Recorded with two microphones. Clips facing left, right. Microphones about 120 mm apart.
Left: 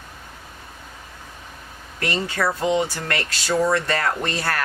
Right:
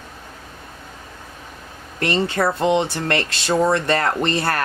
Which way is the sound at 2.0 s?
25° right (ahead or behind).